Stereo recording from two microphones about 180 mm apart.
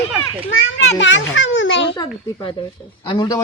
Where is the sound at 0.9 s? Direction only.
90° left.